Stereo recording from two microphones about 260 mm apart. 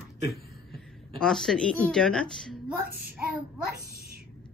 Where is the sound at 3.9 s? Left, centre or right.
Right.